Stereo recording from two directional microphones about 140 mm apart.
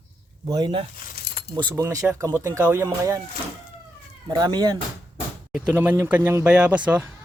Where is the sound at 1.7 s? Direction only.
25° right (ahead or behind).